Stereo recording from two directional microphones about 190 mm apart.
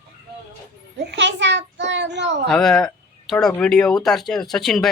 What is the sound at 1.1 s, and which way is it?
A child's voice, 70° right (ahead or behind).